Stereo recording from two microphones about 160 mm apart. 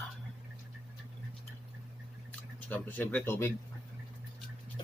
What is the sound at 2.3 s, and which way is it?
Speech, 10° left (ahead or behind).